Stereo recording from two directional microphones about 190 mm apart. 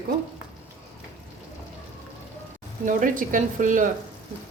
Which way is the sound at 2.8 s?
45° right (ahead or behind).